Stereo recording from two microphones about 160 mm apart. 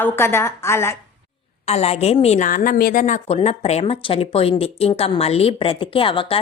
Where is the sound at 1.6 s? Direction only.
40° left (ahead or behind).